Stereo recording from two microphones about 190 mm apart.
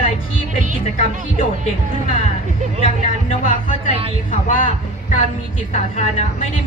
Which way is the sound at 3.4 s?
45° left (ahead or behind).